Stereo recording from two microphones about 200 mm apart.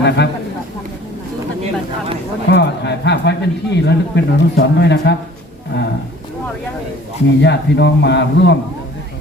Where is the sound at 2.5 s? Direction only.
60° left (ahead or behind).